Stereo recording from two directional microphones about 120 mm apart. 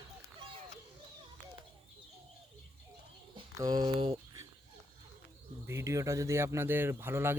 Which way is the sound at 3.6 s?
35° right (ahead or behind).